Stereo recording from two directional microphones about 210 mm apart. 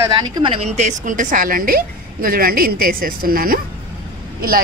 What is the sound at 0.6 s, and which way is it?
A woman's voice, 35° right (ahead or behind).